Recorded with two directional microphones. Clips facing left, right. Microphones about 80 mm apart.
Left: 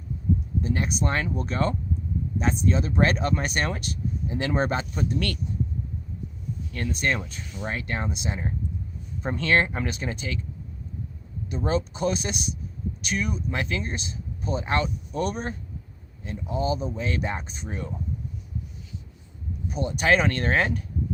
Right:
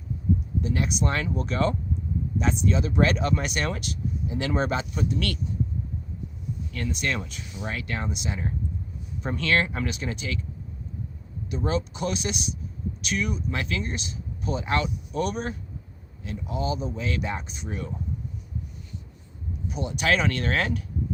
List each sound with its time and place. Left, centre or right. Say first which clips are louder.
0.6 s speech: even; left
6.7 s speech: left 2 dB; left
11.4 s speech: left 1 dB; left
19.7 s speech: left 3 dB; left